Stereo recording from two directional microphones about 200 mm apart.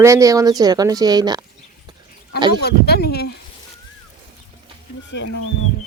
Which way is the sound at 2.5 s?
55° left (ahead or behind).